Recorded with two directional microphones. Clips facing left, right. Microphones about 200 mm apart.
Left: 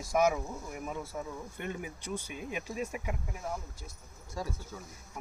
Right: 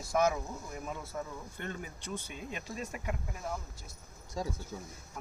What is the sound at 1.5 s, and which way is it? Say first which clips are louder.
Speech: left 2 dB; 10° left (ahead or behind).